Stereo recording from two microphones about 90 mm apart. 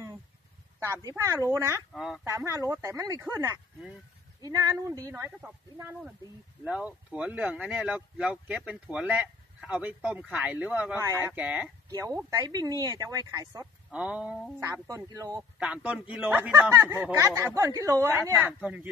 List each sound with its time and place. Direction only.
0.8 s speech: 35° right (ahead or behind)
2.0 s speech: centre (ahead or behind)
2.2 s speech: 35° right (ahead or behind)
4.4 s speech: 40° right (ahead or behind)
6.6 s speech: 15° right (ahead or behind)
12.0 s speech: 30° right (ahead or behind)
12.3 s speech: 45° right (ahead or behind)
13.9 s speech: 15° right (ahead or behind)
14.6 s speech: 40° right (ahead or behind)
15.6 s speech: 15° right (ahead or behind)
17.2 s speech: 35° right (ahead or behind)
18.4 s speech: 15° right (ahead or behind)